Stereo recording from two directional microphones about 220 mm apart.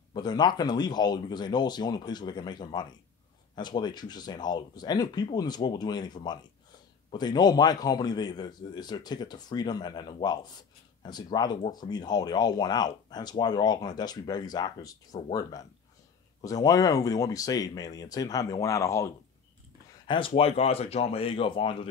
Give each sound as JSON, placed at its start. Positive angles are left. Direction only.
{"t": 0.1, "sound": "speech", "side_deg": 20}
{"t": 16.3, "sound": "speech", "side_deg": 15}
{"t": 20.1, "sound": "speech", "side_deg": 25}